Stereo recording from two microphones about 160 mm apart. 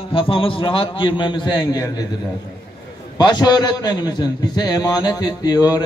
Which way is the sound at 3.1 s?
25° left (ahead or behind).